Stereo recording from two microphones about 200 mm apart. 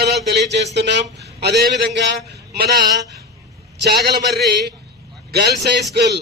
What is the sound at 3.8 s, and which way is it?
A man's voice, 55° right (ahead or behind).